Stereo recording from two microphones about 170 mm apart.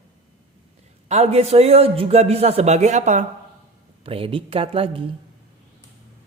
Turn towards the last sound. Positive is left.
turn(degrees=-30)  # may be behind; listen again after turning